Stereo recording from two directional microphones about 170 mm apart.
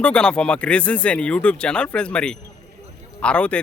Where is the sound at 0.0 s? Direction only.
5° left (ahead or behind).